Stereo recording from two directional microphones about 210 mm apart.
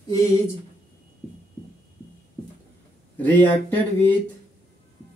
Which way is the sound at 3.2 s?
10° left (ahead or behind).